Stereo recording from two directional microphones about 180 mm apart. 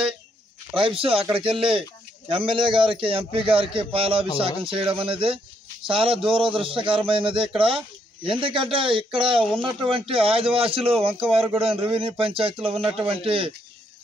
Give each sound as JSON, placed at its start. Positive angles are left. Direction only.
{"t": 0.7, "sound": "speech", "side_deg": -30}